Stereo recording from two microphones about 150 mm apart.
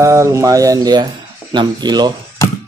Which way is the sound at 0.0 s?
20° right (ahead or behind).